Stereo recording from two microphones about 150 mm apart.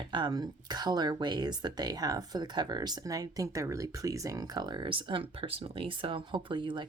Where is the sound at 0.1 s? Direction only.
30° right (ahead or behind).